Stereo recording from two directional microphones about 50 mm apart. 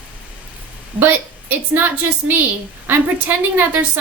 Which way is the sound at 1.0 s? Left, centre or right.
Right.